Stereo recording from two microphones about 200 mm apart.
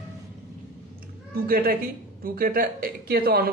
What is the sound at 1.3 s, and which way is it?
Speech, 50° right (ahead or behind).